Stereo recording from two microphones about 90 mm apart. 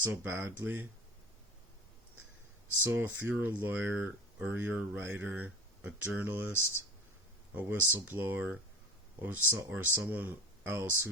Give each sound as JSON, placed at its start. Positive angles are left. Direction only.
{"t": 0.0, "sound": "speech", "side_deg": -25}
{"t": 2.8, "sound": "speech", "side_deg": -20}
{"t": 7.5, "sound": "speech", "side_deg": -25}